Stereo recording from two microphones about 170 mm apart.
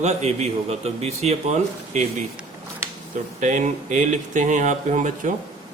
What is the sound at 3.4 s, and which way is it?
A man's voice, 45° right (ahead or behind).